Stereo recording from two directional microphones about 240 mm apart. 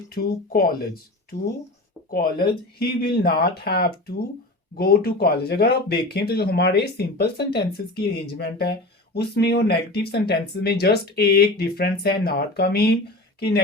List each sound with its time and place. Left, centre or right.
0.1 s speech: left
2.0 s speech: left